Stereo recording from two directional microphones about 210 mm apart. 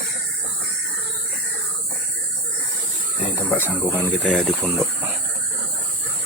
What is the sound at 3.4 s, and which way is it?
Speech, 10° left (ahead or behind).